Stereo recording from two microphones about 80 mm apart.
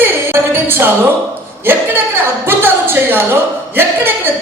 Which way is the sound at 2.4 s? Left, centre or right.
Right.